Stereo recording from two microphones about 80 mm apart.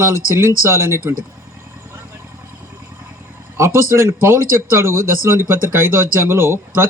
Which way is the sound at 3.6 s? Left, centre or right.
Right.